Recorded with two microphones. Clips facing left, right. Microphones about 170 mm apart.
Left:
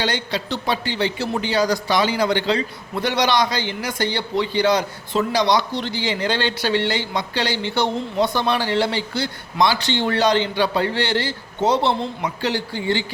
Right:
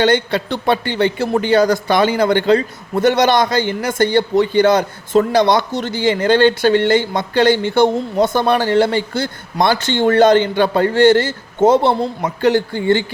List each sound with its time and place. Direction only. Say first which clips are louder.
0.0 s a man's voice: right 9 dB; 55° right (ahead or behind)